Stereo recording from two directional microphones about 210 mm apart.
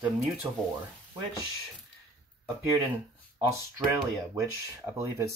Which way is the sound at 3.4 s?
15° right (ahead or behind).